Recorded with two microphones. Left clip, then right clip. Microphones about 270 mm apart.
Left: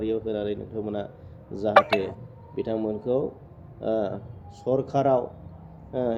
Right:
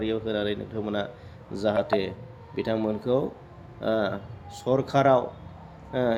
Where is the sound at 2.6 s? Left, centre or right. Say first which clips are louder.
Right 1 dB; centre.